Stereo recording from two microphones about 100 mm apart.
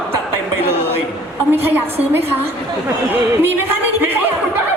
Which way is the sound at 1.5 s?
20° right (ahead or behind).